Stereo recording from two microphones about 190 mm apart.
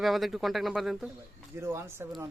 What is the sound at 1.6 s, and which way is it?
Speech, 15° right (ahead or behind).